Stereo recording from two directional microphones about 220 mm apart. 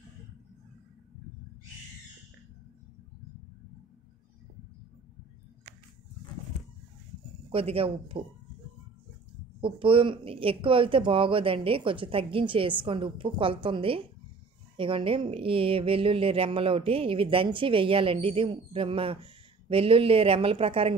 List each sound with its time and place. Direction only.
7.5 s speech: 25° right (ahead or behind)
9.6 s speech: 25° right (ahead or behind)